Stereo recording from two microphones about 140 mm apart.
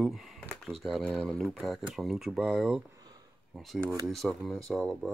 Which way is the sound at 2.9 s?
30° right (ahead or behind).